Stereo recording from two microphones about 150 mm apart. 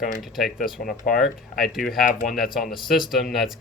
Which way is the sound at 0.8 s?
65° left (ahead or behind).